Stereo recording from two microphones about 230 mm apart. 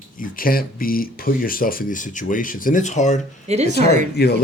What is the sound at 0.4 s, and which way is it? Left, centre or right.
Speech, left.